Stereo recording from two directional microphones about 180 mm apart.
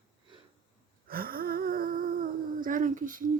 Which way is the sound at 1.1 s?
55° right (ahead or behind).